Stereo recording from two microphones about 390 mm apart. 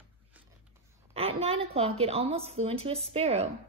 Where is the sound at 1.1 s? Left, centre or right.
Centre.